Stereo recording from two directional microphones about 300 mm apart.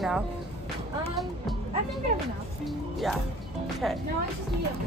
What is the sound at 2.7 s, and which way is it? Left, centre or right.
Music, centre.